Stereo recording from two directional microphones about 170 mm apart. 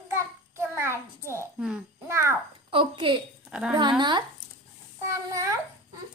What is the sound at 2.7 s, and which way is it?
Speech, 30° right (ahead or behind).